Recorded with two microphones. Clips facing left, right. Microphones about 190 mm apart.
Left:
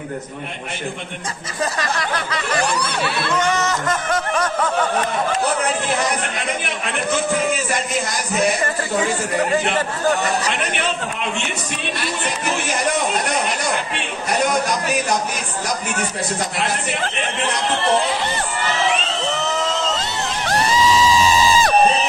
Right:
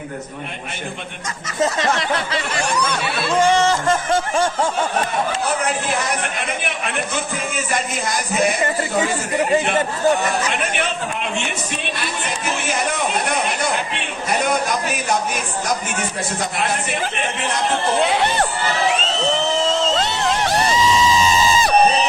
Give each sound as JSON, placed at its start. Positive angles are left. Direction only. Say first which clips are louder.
{"t": 1.6, "sound": "music", "louder": "right 4 dB", "side_deg": -25}
{"t": 18.1, "sound": "speech", "louder": "right 4 dB", "side_deg": -65}